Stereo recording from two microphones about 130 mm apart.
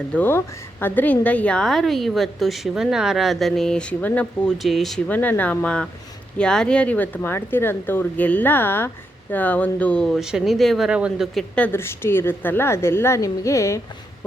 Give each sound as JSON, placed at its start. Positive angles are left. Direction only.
{"t": 0.1, "sound": "a woman's voice", "side_deg": 15}
{"t": 4.5, "sound": "a woman's voice", "side_deg": 0}
{"t": 5.0, "sound": "a woman's voice", "side_deg": 15}
{"t": 11.3, "sound": "a woman's voice", "side_deg": 10}